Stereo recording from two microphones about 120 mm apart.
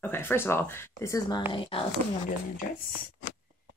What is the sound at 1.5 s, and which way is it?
Speech, 50° left (ahead or behind).